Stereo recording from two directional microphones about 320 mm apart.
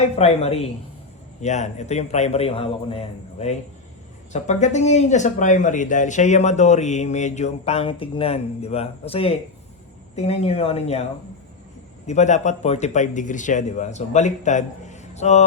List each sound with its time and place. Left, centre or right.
0.0 s speech: centre
12.0 s speech: left